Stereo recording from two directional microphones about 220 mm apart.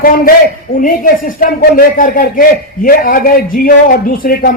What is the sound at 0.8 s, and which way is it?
A man's voice, 40° left (ahead or behind).